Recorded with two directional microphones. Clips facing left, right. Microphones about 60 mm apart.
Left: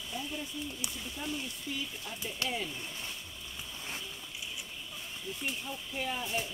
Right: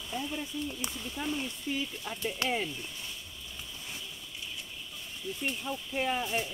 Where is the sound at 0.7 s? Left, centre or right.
Right.